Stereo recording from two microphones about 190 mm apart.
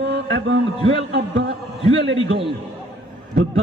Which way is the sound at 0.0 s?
70° right (ahead or behind).